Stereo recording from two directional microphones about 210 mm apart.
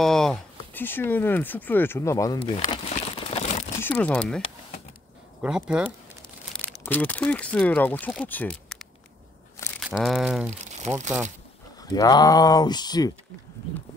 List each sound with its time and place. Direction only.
0.0 s speech: centre (ahead or behind)
2.3 s crumpling: 25° left (ahead or behind)
3.8 s speech: 10° left (ahead or behind)
5.4 s speech: 5° right (ahead or behind)
6.6 s speech: 10° left (ahead or behind)
10.5 s crumpling: 30° right (ahead or behind)
11.8 s speech: 20° left (ahead or behind)